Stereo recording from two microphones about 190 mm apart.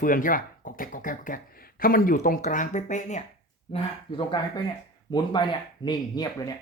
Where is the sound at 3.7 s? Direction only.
25° left (ahead or behind).